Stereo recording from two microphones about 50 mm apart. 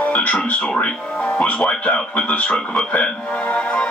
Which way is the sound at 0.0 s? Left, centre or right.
Left.